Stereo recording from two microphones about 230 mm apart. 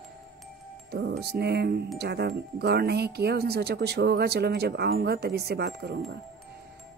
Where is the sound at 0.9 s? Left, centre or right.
Right.